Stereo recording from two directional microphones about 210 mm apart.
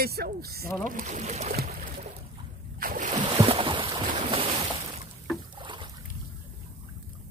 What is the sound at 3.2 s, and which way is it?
Boat, 20° right (ahead or behind).